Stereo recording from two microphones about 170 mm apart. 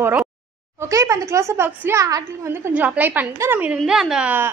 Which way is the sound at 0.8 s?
20° right (ahead or behind).